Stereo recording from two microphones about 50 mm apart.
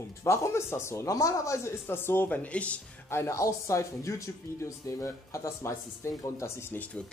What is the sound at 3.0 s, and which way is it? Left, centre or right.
Speech, left.